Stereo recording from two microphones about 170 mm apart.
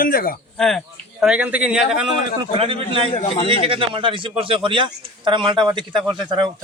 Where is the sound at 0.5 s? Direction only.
Centre (ahead or behind).